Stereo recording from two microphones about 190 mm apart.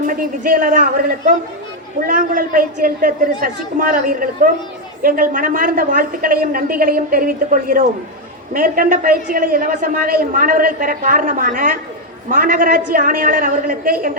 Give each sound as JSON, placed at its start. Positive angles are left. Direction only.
{"t": 0.1, "sound": "a man's voice", "side_deg": -45}